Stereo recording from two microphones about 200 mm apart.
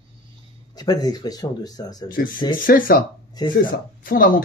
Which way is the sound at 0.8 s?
20° left (ahead or behind).